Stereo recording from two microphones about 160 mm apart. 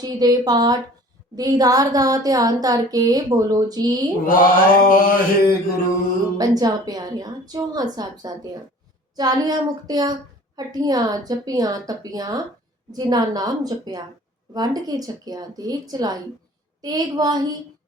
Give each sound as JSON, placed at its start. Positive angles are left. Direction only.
{"t": 0.0, "sound": "a woman's voice", "side_deg": -25}
{"t": 4.3, "sound": "mantra", "side_deg": 60}
{"t": 6.3, "sound": "a woman's voice", "side_deg": -25}